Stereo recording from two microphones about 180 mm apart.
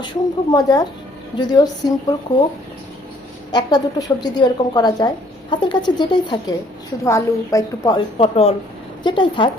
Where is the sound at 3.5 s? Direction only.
25° left (ahead or behind).